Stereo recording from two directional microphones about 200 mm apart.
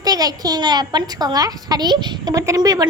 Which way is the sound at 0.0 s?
20° right (ahead or behind).